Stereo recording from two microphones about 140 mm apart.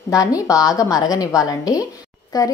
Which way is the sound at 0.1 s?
25° left (ahead or behind).